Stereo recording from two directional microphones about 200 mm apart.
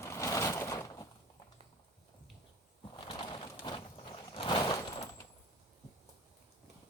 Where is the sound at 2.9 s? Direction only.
25° left (ahead or behind).